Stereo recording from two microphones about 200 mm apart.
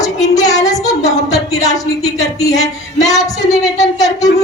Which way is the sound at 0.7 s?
15° left (ahead or behind).